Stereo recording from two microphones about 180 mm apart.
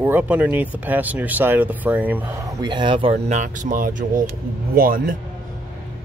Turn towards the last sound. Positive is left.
turn(degrees=-50)  # may be behind; listen again after turning